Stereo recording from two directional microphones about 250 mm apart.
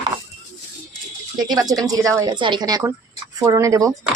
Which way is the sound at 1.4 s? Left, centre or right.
Centre.